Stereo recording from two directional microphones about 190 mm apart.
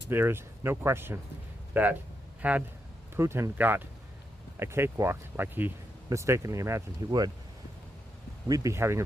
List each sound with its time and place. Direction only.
0.1 s speech: 10° right (ahead or behind)
8.4 s speech: 15° right (ahead or behind)